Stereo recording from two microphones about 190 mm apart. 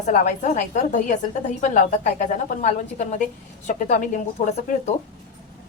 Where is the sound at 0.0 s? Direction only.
40° left (ahead or behind).